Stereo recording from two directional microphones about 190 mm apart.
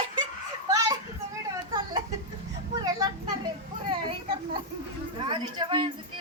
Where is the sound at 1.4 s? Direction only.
20° right (ahead or behind).